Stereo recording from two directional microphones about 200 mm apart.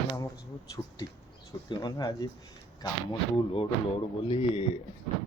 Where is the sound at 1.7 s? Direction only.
20° left (ahead or behind).